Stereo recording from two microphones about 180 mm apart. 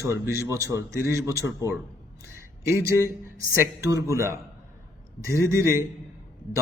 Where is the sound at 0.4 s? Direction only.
15° right (ahead or behind).